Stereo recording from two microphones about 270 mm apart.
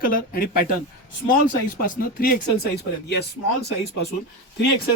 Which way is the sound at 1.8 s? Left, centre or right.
Left.